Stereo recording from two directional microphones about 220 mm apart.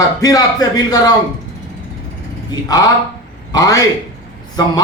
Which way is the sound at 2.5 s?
15° left (ahead or behind).